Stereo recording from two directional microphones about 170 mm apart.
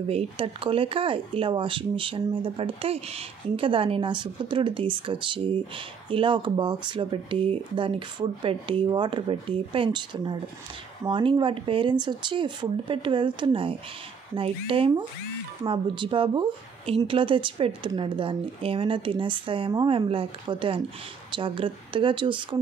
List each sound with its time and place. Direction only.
0.1 s speech: 35° right (ahead or behind)